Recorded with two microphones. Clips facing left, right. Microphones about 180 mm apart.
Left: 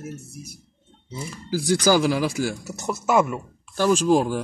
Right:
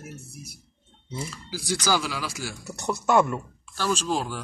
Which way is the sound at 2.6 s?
5° left (ahead or behind).